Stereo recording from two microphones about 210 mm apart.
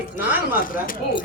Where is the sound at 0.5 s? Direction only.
40° left (ahead or behind).